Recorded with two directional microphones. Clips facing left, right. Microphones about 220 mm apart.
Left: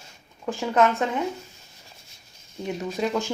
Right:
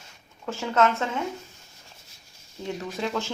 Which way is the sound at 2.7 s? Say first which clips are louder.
Left 3 dB; 15° left (ahead or behind).